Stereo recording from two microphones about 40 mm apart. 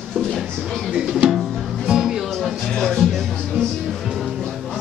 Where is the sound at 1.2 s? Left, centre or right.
Centre.